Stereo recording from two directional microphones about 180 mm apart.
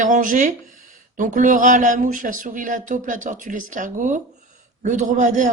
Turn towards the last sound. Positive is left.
turn(degrees=-45)  # may be behind; listen again after turning